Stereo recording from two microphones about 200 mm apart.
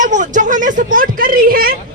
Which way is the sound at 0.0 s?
40° right (ahead or behind).